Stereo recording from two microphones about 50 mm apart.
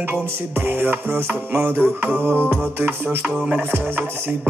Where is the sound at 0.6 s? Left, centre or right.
Right.